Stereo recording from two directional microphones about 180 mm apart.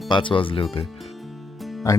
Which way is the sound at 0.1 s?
25° left (ahead or behind).